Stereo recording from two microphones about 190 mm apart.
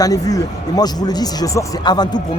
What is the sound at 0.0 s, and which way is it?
Speech, 20° left (ahead or behind).